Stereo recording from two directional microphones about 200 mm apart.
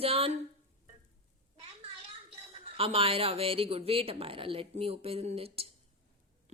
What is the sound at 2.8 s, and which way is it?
Speech, 30° right (ahead or behind).